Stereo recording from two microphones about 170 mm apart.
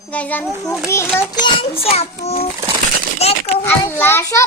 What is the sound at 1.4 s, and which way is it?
A child's voice, 35° left (ahead or behind).